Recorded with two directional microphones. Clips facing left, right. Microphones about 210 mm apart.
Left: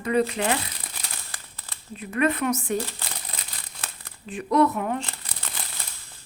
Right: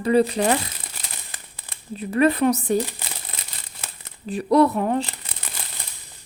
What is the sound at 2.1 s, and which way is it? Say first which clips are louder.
Speech: right 5 dB; 35° right (ahead or behind).